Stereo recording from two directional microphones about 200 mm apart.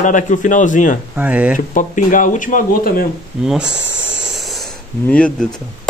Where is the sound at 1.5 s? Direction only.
40° left (ahead or behind).